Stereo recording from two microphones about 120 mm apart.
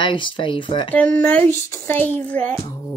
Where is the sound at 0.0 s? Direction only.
45° left (ahead or behind).